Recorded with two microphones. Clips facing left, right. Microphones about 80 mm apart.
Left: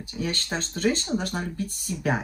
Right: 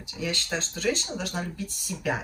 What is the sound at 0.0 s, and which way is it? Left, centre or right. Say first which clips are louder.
Speech: left 2 dB; left.